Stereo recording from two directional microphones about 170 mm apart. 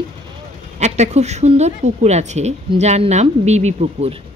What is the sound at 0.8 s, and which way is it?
Speech, 40° right (ahead or behind).